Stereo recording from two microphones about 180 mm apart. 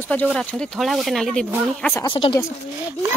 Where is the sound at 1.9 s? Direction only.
25° left (ahead or behind).